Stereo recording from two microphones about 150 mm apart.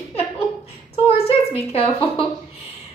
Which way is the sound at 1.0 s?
40° left (ahead or behind).